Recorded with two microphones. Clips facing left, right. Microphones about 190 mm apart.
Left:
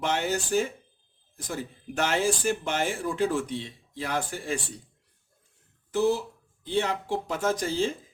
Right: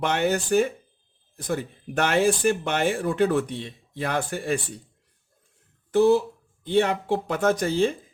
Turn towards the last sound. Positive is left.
turn(degrees=-60)  # may be behind; listen again after turning